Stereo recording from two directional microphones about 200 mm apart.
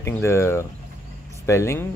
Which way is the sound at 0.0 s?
15° left (ahead or behind).